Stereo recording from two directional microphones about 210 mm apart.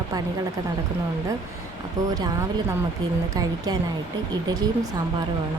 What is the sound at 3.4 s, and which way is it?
Speech, 20° right (ahead or behind).